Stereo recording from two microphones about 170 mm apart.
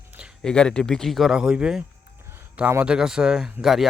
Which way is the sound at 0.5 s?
5° left (ahead or behind).